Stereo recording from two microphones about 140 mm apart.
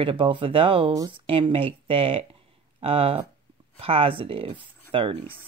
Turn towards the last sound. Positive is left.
turn(degrees=-40)  # may be behind; listen again after turning